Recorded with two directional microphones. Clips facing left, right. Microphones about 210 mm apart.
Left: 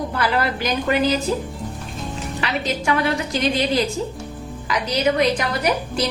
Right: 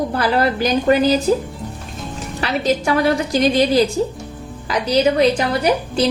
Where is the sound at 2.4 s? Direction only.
35° right (ahead or behind).